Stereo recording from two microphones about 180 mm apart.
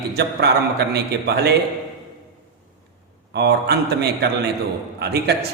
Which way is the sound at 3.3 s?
65° right (ahead or behind).